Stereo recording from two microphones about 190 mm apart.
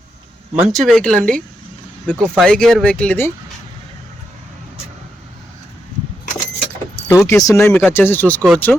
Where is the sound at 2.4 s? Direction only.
5° left (ahead or behind).